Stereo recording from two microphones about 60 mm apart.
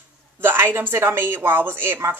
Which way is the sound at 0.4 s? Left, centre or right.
Right.